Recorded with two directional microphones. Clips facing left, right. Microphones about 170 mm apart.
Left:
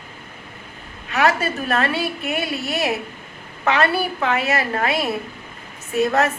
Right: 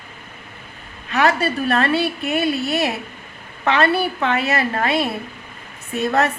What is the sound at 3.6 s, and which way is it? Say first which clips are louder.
A woman's voice: right 2 dB; 30° right (ahead or behind).